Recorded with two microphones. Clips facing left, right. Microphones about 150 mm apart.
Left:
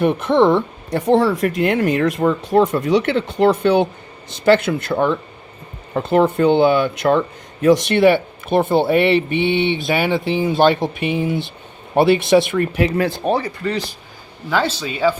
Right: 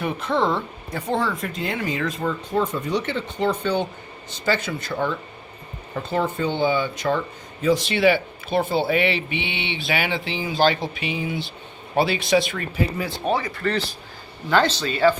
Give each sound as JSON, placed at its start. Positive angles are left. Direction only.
{"t": 0.3, "sound": "speech", "side_deg": 60}
{"t": 13.6, "sound": "a man's voice", "side_deg": 15}